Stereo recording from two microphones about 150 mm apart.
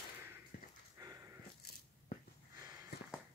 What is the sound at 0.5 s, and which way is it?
Dog, 75° left (ahead or behind).